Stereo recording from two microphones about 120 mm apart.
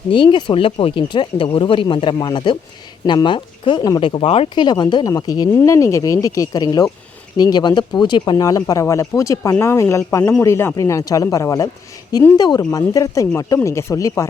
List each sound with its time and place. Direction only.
0.1 s speech: 45° left (ahead or behind)
4.5 s speech: 35° left (ahead or behind)